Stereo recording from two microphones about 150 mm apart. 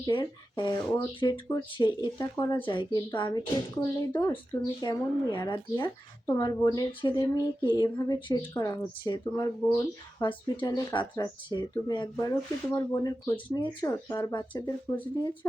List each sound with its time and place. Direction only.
0.0 s speech: 30° left (ahead or behind)
2.6 s speech: 35° left (ahead or behind)
10.2 s speech: 30° left (ahead or behind)
14.3 s speech: 30° left (ahead or behind)